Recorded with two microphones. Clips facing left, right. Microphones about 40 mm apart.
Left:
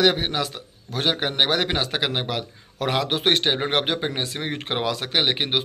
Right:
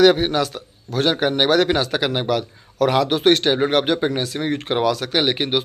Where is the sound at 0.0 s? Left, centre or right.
Centre.